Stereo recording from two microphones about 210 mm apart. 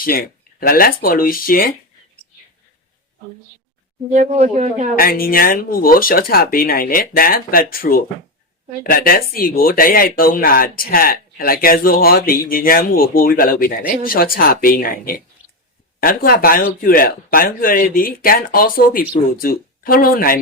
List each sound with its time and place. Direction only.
0.0 s speech: 45° left (ahead or behind)
4.1 s speech: 35° right (ahead or behind)
4.9 s speech: 45° left (ahead or behind)